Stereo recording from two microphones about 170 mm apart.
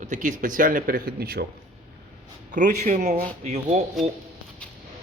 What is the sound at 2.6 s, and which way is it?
Speech, 50° right (ahead or behind).